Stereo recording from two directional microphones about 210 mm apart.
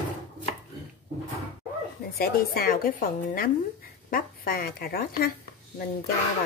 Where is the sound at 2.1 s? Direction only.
45° left (ahead or behind).